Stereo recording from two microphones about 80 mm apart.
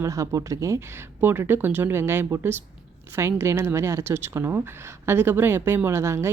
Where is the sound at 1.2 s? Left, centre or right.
Right.